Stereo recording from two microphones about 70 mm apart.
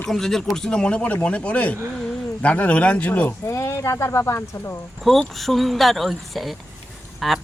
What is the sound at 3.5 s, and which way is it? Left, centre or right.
Speech, left.